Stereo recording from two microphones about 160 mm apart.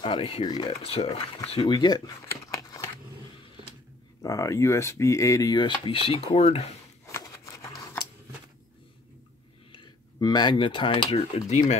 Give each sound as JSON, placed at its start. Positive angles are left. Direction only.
{"t": 0.0, "sound": "speech", "side_deg": 30}
{"t": 4.2, "sound": "speech", "side_deg": 20}
{"t": 7.1, "sound": "scissors", "side_deg": 15}
{"t": 9.7, "sound": "speech", "side_deg": 25}